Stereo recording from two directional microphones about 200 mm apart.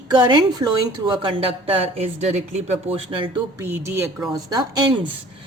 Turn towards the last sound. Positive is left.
turn(degrees=-20)  # may be behind; listen again after turning